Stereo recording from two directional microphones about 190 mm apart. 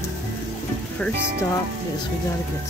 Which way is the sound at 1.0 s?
5° left (ahead or behind).